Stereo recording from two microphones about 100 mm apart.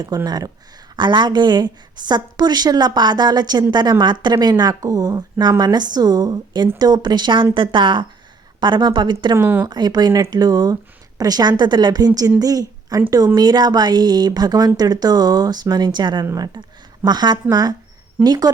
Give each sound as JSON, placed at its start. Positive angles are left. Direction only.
{"t": 0.3, "sound": "speech", "side_deg": -40}
{"t": 9.3, "sound": "speech", "side_deg": -20}
{"t": 9.6, "sound": "a woman's voice", "side_deg": -45}